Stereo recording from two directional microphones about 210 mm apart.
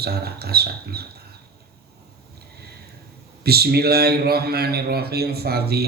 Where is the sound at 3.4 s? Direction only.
50° right (ahead or behind).